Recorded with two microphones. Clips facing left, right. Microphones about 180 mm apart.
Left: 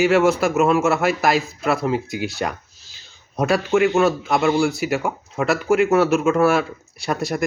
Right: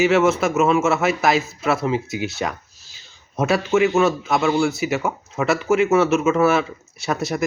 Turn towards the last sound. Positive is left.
turn(degrees=0)  # may be behind; listen again after turning